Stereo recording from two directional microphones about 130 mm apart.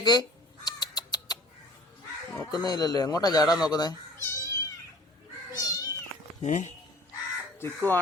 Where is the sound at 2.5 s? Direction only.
30° left (ahead or behind).